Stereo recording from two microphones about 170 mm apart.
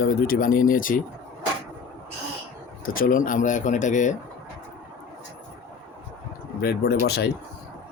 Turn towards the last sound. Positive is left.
turn(degrees=70)  # may be behind; listen again after turning